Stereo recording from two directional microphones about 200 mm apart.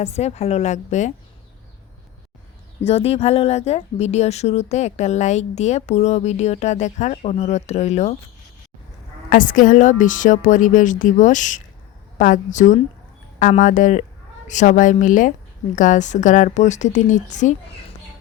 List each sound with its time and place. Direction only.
0.0 s speech: 35° left (ahead or behind)
2.8 s speech: 30° left (ahead or behind)
9.3 s speech: 40° left (ahead or behind)